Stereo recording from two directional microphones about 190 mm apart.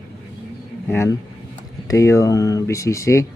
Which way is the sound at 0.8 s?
15° left (ahead or behind).